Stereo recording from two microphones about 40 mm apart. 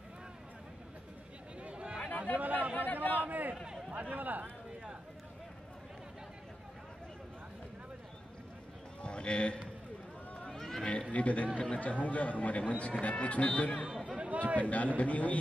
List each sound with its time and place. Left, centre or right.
1.6 s chatter: right
2.0 s chatter: left
2.3 s chatter: right
2.8 s chatter: left
3.3 s a man's voice: right
9.0 s run: left
10.5 s run: centre
10.8 s speech: left
14.0 s a sound: right
14.6 s speech: left